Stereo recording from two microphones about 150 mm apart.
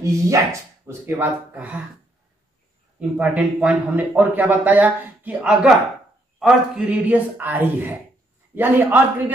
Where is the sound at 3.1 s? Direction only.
10° right (ahead or behind).